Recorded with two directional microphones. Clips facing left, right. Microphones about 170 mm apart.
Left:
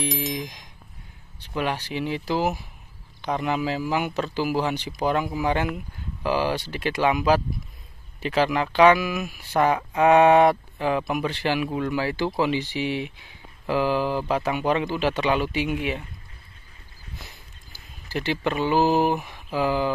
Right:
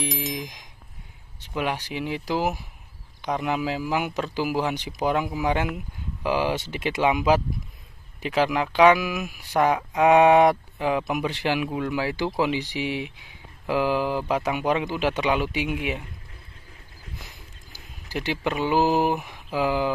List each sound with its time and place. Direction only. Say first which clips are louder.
0.0 s a sound: left 2 dB; centre (ahead or behind)
1.5 s speech: left 1 dB; 10° right (ahead or behind)
8.3 s speech: even; 5° right (ahead or behind)
10.8 s speech: even; 10° right (ahead or behind)
17.7 s speech: left 1 dB; 15° right (ahead or behind)
19.2 s mantra: even; 10° right (ahead or behind)